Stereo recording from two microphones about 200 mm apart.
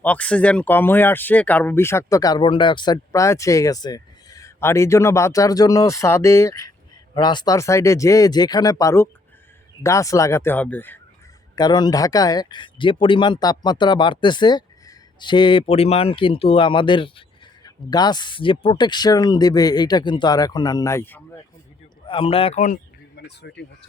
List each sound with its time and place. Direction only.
0.0 s speech: 5° left (ahead or behind)
11.5 s speech: 20° left (ahead or behind)
22.0 s speech: 25° left (ahead or behind)
23.1 s speech: 55° left (ahead or behind)